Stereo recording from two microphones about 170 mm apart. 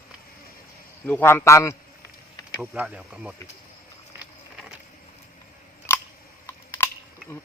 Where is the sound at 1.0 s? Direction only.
10° left (ahead or behind).